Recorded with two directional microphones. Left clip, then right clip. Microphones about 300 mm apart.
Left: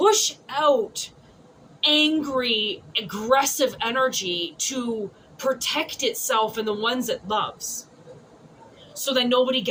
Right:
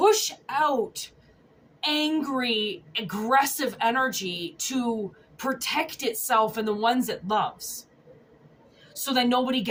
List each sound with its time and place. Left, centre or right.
0.0 s a woman's voice: centre
1.9 s a woman's voice: centre
9.0 s a woman's voice: centre